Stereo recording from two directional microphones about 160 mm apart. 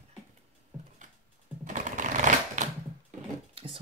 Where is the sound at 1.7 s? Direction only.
50° right (ahead or behind).